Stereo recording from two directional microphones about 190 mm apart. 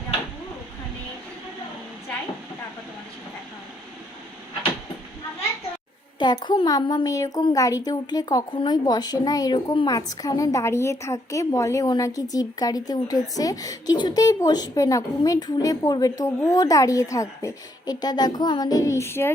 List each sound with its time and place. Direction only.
6.1 s a woman's voice: 25° left (ahead or behind)